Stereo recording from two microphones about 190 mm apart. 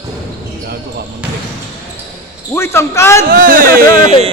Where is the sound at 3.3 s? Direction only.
50° right (ahead or behind).